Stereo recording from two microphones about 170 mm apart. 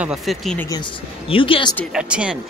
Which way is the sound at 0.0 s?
Centre (ahead or behind).